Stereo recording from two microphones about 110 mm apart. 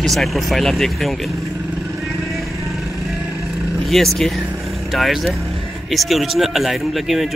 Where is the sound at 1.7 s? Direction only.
Centre (ahead or behind).